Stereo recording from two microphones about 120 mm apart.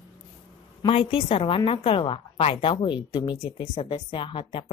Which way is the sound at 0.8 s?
50° left (ahead or behind).